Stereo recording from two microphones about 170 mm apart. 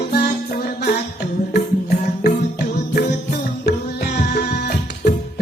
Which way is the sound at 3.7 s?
70° left (ahead or behind).